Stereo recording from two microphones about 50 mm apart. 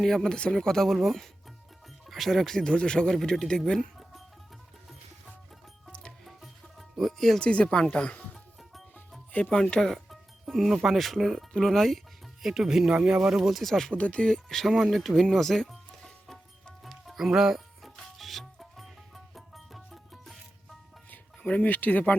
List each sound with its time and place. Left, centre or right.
0.0 s speech: centre
5.9 s music: left
6.2 s music: centre
7.3 s speech: centre
9.5 s speech: centre
12.4 s speech: centre
12.9 s speech: centre
13.4 s speech: centre
13.9 s speech: left
14.3 s speech: centre
16.8 s music: centre
21.1 s speech: left